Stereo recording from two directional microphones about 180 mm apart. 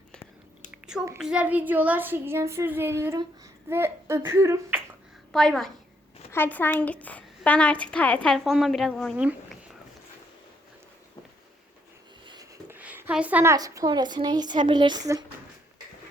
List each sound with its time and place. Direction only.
0.7 s a sound: 5° right (ahead or behind)
1.2 s a child's voice: 5° right (ahead or behind)
5.3 s a woman's voice: centre (ahead or behind)
9.1 s speech: 5° right (ahead or behind)
12.2 s a sound: 25° right (ahead or behind)
12.6 s a woman's voice: 10° right (ahead or behind)